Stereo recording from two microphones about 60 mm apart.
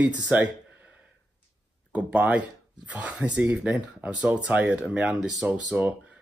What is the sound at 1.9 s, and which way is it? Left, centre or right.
Speech, right.